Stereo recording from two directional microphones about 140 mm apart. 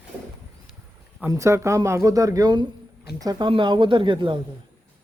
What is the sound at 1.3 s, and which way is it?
Speech, 20° right (ahead or behind).